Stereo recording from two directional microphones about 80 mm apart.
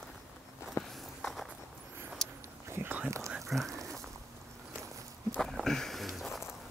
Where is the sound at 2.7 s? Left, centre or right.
Right.